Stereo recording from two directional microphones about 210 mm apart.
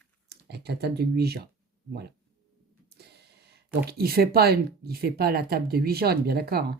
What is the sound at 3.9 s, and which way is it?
Speech, 45° right (ahead or behind).